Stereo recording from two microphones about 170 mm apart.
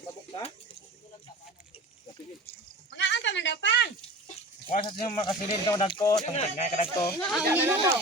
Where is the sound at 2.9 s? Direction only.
90° left.